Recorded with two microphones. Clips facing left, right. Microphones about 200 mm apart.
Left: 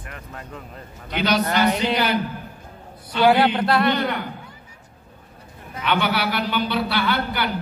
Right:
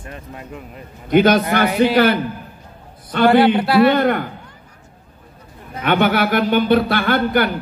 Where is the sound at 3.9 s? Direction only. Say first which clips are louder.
Right 7 dB; 50° right (ahead or behind).